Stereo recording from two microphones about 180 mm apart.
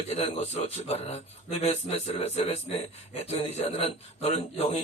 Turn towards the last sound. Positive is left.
turn(degrees=35)  # may be behind; listen again after turning